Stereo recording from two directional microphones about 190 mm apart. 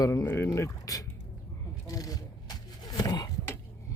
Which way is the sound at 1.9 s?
20° left (ahead or behind).